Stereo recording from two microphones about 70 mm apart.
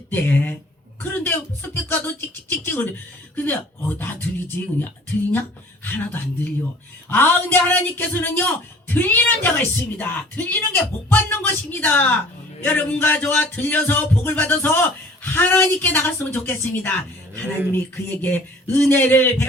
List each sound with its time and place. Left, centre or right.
0.1 s speech: left
1.3 s music: left
2.5 s speech: left
17.9 s speech: left